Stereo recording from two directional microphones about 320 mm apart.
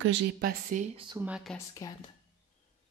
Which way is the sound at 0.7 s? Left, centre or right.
Right.